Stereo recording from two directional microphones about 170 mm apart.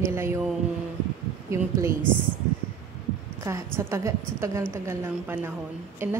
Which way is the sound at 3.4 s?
15° right (ahead or behind).